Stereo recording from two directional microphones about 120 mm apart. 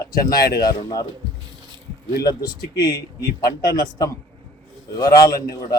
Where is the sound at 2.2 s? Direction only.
35° left (ahead or behind).